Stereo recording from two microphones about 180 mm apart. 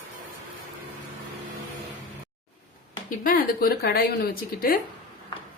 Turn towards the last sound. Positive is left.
turn(degrees=55)  # may be behind; listen again after turning